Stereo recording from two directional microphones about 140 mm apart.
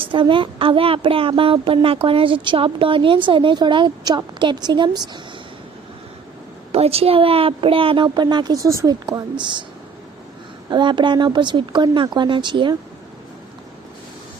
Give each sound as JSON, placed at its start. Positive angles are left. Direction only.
{"t": 0.0, "sound": "speech", "side_deg": -35}
{"t": 6.7, "sound": "speech", "side_deg": -45}
{"t": 9.0, "sound": "speech", "side_deg": -35}
{"t": 10.7, "sound": "speech", "side_deg": -35}